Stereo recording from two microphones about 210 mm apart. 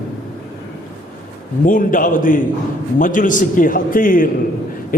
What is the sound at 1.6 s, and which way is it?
A man's voice, 40° left (ahead or behind).